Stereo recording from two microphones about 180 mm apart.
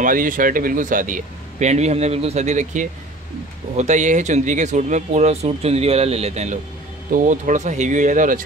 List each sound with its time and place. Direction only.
0.0 s a man's voice: 50° right (ahead or behind)